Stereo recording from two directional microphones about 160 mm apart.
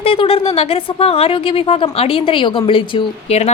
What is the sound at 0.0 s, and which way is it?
Speech, 35° left (ahead or behind).